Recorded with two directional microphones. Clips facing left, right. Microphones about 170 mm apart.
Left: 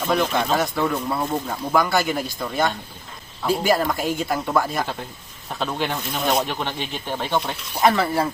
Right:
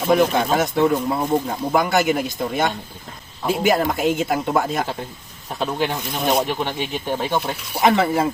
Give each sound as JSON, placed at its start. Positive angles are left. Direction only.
{"t": 0.1, "sound": "speech", "side_deg": -20}
{"t": 5.5, "sound": "speech", "side_deg": -10}
{"t": 7.9, "sound": "speech", "side_deg": -20}